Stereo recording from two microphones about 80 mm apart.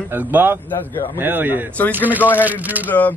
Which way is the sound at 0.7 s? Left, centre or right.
Left.